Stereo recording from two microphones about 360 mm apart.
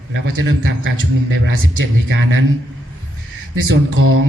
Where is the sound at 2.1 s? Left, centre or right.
Right.